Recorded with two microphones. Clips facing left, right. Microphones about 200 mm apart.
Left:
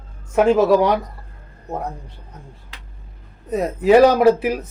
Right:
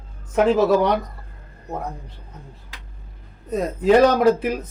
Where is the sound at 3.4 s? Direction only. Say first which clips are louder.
Left 2 dB; 5° left (ahead or behind).